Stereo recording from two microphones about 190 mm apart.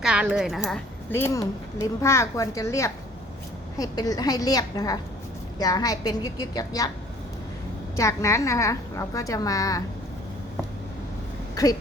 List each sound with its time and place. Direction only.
0.0 s a woman's voice: 5° right (ahead or behind)
1.1 s a woman's voice: 10° left (ahead or behind)
7.9 s a woman's voice: 15° left (ahead or behind)
11.5 s a sound: 20° left (ahead or behind)